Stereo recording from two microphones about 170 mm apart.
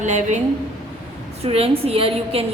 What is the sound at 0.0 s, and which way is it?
A man's voice, 45° right (ahead or behind).